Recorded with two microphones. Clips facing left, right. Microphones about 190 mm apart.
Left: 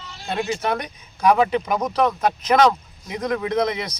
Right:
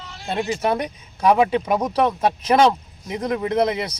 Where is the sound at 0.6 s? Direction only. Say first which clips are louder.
Right 3 dB; 10° right (ahead or behind).